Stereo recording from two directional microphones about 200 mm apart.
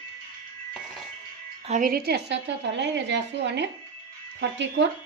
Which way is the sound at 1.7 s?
40° right (ahead or behind).